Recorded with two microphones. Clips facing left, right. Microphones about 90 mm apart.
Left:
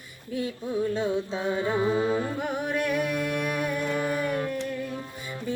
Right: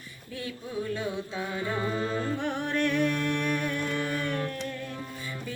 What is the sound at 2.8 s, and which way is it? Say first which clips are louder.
Music: right 2 dB; 10° left (ahead or behind).